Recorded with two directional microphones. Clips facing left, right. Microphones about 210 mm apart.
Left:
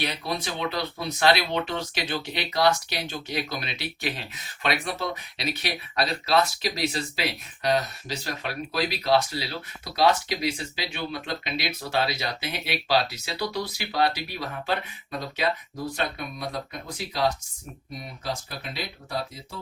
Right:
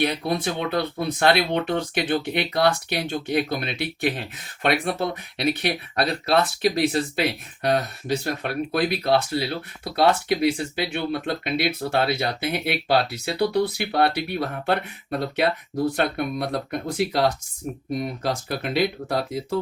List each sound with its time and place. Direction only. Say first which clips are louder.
0.0 s speech: right 7 dB; 55° right (ahead or behind); by 19.5 s 80° right